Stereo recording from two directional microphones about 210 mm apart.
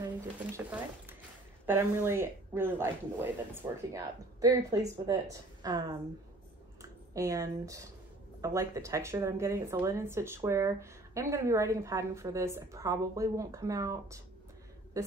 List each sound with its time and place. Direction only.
0.7 s zipper: 10° right (ahead or behind)
1.7 s speech: 10° right (ahead or behind)